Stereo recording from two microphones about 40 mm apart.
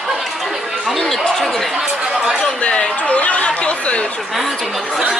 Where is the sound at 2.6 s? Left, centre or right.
Left.